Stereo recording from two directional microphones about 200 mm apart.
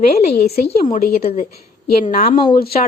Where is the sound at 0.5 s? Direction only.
50° left (ahead or behind).